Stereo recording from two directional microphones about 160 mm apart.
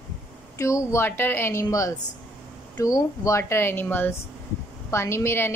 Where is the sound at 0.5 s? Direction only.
20° left (ahead or behind).